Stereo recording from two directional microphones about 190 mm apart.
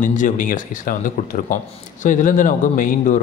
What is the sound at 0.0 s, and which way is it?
A man's voice, 40° left (ahead or behind).